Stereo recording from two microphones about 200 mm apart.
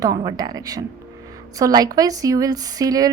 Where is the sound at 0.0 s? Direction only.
20° right (ahead or behind).